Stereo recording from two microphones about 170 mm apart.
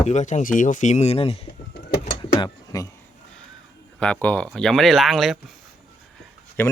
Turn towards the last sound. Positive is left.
turn(degrees=10)  # may be behind; listen again after turning